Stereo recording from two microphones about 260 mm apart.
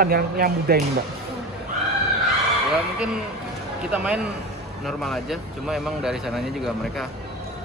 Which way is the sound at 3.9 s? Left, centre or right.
Centre.